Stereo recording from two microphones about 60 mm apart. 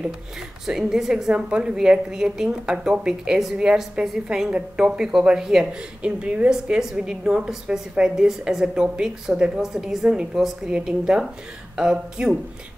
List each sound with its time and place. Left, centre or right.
0.7 s a woman's voice: centre
6.5 s a woman's voice: centre